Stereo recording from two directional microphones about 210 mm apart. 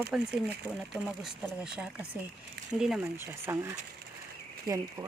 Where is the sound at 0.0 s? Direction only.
5° right (ahead or behind).